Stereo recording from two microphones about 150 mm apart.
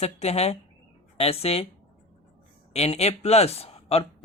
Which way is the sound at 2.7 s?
45° left (ahead or behind).